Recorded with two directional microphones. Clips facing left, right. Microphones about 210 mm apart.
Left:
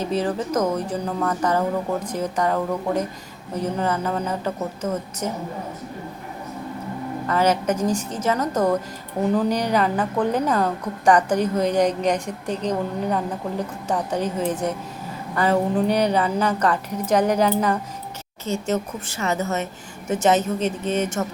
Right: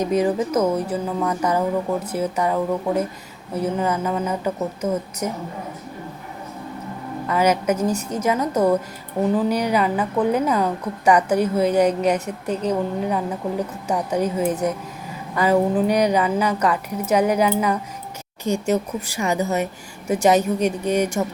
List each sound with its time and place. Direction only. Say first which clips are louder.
0.0 s a woman's voice: right 4 dB; 10° right (ahead or behind)
7.3 s a woman's voice: right 1 dB; 10° right (ahead or behind)